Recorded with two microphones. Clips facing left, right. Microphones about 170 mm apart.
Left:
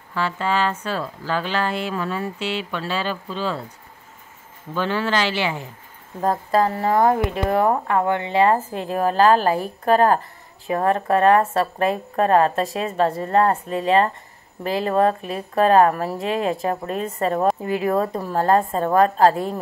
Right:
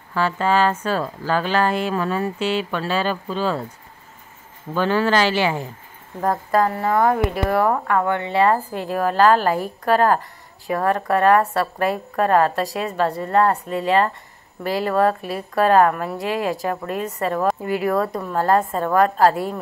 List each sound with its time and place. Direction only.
0.1 s speech: 45° right (ahead or behind)
4.7 s speech: 45° right (ahead or behind)
6.2 s speech: 25° left (ahead or behind)